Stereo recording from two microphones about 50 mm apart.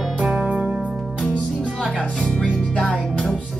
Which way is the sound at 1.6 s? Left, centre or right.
Centre.